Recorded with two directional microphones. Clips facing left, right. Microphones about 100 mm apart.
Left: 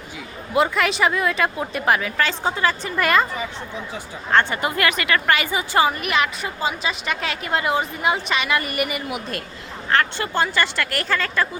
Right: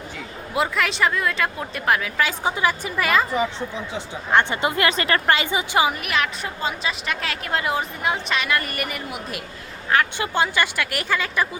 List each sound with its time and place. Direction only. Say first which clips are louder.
0.5 s a woman's voice: left 3 dB; centre (ahead or behind)
3.0 s a woman's voice: left 2 dB; centre (ahead or behind)
3.9 s speech: even; 15° right (ahead or behind)
6.0 s a woman's voice: left 2 dB; centre (ahead or behind)
9.9 s speech: even; 10° right (ahead or behind)